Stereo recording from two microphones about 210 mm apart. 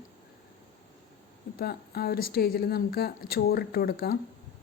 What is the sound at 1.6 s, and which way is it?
A woman's voice, 50° left (ahead or behind).